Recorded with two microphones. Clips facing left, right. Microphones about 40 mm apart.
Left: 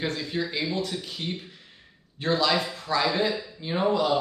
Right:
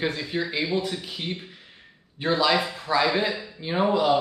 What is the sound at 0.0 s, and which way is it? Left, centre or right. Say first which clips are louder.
Speech: right 2 dB; centre.